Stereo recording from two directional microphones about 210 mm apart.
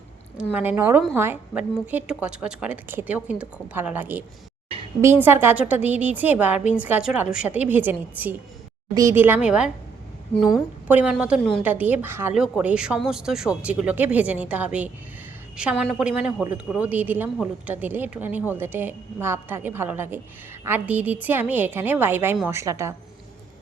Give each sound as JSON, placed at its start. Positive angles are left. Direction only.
{"t": 0.5, "sound": "a woman's voice", "side_deg": -10}